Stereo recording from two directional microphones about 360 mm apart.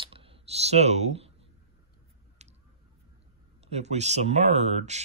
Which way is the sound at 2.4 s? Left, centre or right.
Centre.